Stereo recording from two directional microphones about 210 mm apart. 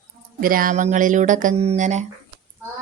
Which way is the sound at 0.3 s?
40° right (ahead or behind).